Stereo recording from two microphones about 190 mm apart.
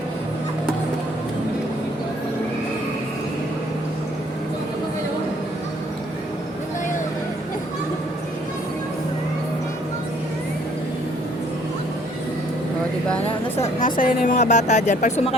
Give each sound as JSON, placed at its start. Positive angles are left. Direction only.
{"t": 13.2, "sound": "speech", "side_deg": 40}